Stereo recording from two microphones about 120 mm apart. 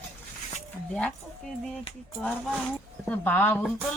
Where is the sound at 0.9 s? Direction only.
5° left (ahead or behind).